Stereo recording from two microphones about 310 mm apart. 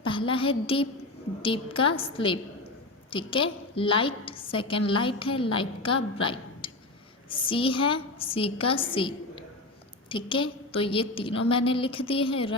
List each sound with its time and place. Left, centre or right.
0.0 s a woman's voice: centre